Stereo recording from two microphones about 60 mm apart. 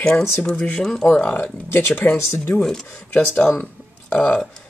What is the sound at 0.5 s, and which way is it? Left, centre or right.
Speech, centre.